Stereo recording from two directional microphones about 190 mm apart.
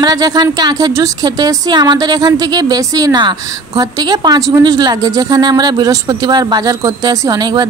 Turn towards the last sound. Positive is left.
turn(degrees=-20)  # may be behind; listen again after turning